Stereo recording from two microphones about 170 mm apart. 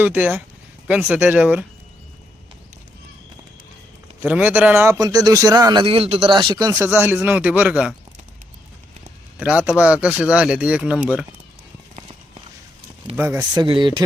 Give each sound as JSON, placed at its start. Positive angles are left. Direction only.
{"t": 0.0, "sound": "speech", "side_deg": -10}
{"t": 4.2, "sound": "speech", "side_deg": -10}
{"t": 6.7, "sound": "speech", "side_deg": -15}
{"t": 9.4, "sound": "speech", "side_deg": -5}
{"t": 13.1, "sound": "speech", "side_deg": -15}